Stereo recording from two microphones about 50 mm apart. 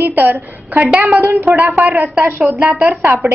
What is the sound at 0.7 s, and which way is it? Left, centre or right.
A woman's voice, right.